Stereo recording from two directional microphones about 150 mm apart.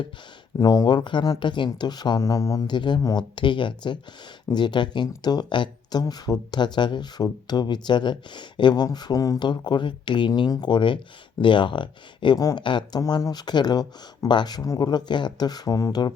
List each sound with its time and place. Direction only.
0.6 s speech: 25° left (ahead or behind)